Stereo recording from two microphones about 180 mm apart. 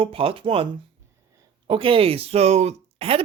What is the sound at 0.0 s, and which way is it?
A man's voice, 30° right (ahead or behind).